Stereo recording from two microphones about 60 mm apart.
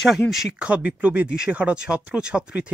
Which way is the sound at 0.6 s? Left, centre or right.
Right.